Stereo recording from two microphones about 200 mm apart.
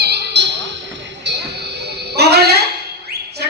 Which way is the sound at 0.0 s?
55° right (ahead or behind).